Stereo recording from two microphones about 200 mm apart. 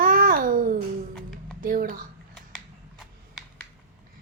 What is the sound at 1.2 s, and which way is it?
Music, centre (ahead or behind).